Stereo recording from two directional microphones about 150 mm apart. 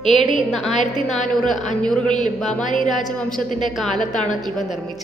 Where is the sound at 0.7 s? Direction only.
50° left (ahead or behind).